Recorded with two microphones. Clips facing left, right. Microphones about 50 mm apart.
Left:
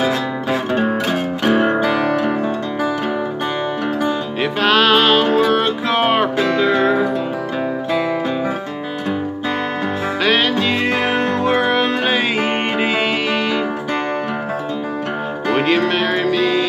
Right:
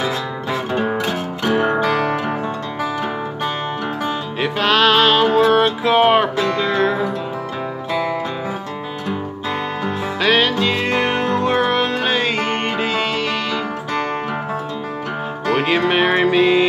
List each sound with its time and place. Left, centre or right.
1.0 s music: centre
4.4 s music: centre
10.2 s music: centre
15.5 s music: centre
15.9 s music: right